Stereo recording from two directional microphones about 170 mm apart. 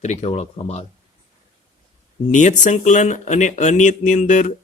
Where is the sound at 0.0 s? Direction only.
40° left (ahead or behind).